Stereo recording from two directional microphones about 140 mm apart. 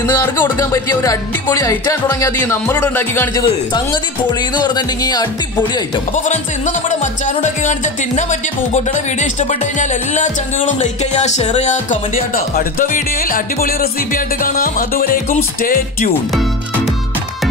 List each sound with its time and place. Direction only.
0.0 s speech: 25° left (ahead or behind)
3.4 s speech: 30° left (ahead or behind)
6.1 s music: 60° left (ahead or behind); by 16.1 s 90° left